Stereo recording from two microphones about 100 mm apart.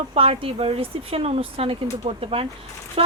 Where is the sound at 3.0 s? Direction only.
90° right.